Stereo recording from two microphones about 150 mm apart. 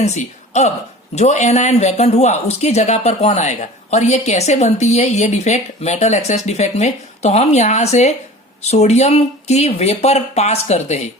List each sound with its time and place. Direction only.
0.0 s a woman's voice: 50° left (ahead or behind)